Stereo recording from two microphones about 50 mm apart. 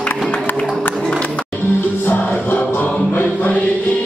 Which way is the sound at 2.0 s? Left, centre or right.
Left.